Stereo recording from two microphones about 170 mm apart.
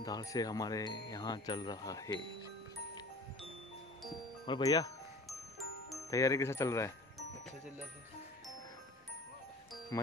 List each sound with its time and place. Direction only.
0.0 s speech: 20° left (ahead or behind)
4.5 s speech: 25° left (ahead or behind)
6.0 s speech: 20° left (ahead or behind)